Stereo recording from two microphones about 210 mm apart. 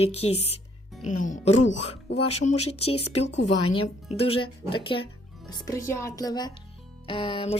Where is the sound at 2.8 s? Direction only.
30° left (ahead or behind).